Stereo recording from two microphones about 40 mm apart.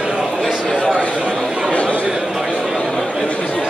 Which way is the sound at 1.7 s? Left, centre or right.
Left.